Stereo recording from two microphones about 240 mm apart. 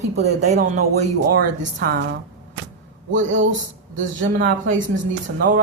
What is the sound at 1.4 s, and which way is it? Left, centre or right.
Speech, right.